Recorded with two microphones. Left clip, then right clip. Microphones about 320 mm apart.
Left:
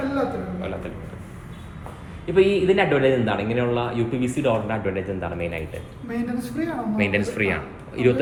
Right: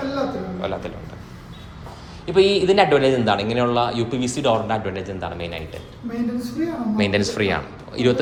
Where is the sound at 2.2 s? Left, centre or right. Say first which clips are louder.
Right 2 dB; centre.